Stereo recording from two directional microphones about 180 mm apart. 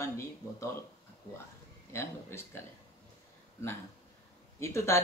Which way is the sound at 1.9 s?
15° left (ahead or behind).